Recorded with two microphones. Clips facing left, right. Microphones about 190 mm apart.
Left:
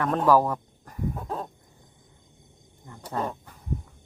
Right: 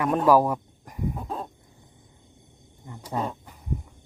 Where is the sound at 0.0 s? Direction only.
10° right (ahead or behind).